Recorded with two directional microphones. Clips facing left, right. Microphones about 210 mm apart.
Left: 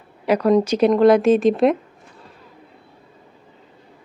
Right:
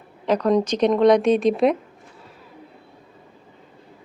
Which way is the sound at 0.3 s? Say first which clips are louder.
Left 3 dB; 10° left (ahead or behind).